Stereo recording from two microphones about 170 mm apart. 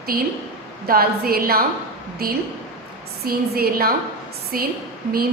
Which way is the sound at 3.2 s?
65° right (ahead or behind).